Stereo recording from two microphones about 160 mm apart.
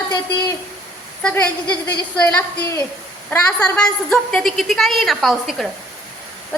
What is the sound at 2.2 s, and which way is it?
A woman's voice, 15° left (ahead or behind).